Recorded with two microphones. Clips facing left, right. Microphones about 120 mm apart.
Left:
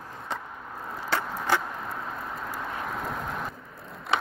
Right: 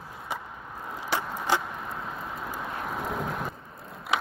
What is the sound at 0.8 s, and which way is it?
Vehicle, 10° right (ahead or behind).